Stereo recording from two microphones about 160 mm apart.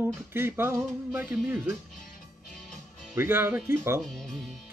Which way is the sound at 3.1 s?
15° right (ahead or behind).